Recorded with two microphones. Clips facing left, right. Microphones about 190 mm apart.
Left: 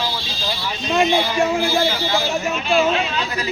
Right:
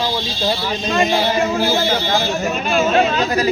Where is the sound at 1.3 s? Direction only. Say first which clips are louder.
Right 1 dB; 45° right (ahead or behind).